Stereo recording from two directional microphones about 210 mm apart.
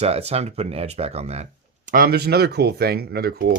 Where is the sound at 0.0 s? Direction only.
30° right (ahead or behind).